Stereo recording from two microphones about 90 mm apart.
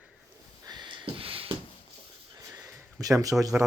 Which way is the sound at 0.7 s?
55° right (ahead or behind).